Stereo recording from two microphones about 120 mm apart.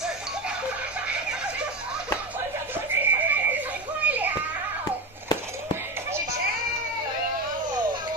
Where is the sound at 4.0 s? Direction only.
15° right (ahead or behind).